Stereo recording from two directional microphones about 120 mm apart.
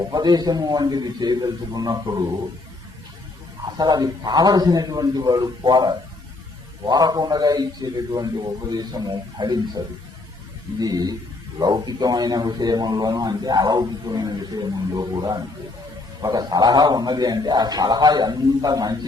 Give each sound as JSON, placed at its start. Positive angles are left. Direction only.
{"t": 0.0, "sound": "a man's voice", "side_deg": -35}
{"t": 3.8, "sound": "a man's voice", "side_deg": -35}